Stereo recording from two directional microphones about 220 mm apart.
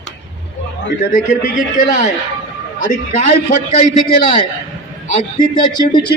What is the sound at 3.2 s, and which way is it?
Speech, 40° left (ahead or behind).